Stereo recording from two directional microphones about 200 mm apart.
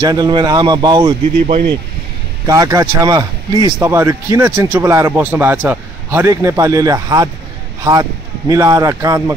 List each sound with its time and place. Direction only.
0.0 s speech: 20° right (ahead or behind)
2.4 s a man's voice: 15° right (ahead or behind)